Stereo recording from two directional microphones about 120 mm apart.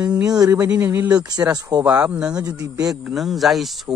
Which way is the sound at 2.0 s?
10° right (ahead or behind).